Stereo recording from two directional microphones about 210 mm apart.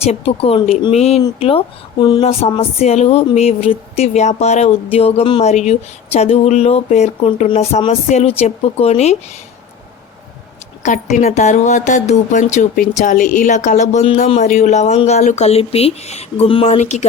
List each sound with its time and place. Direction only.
0.0 s speech: 30° left (ahead or behind)
10.8 s a woman's voice: 35° left (ahead or behind)